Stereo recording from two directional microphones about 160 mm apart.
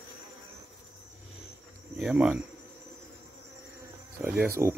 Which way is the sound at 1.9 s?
5° right (ahead or behind).